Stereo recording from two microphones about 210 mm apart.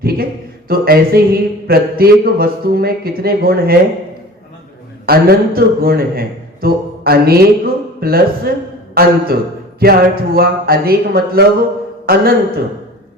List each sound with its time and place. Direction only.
0.0 s a sound: 45° right (ahead or behind)
0.7 s a man's voice: 45° right (ahead or behind)
5.0 s a man's voice: 45° right (ahead or behind)